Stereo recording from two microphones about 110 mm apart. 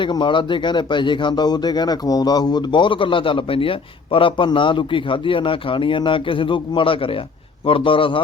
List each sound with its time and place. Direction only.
0.0 s speech: 45° left (ahead or behind)